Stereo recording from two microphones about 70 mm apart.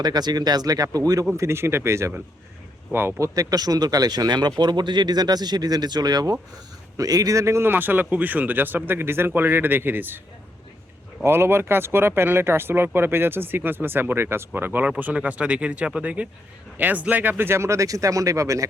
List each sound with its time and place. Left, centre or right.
0.0 s speech: right
1.4 s speech: right
2.9 s speech: right
3.2 s speech: right
6.9 s speech: right
11.2 s speech: right